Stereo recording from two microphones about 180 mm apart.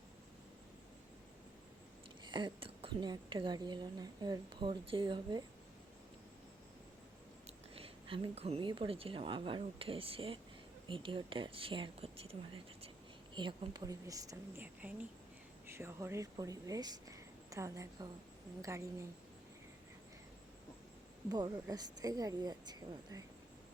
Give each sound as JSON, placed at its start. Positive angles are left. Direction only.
{"t": 2.2, "sound": "a woman's voice", "side_deg": -25}
{"t": 7.4, "sound": "a woman's voice", "side_deg": -30}
{"t": 21.2, "sound": "a woman's voice", "side_deg": -20}